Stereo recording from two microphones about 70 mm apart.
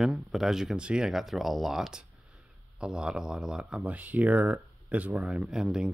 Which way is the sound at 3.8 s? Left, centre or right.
Right.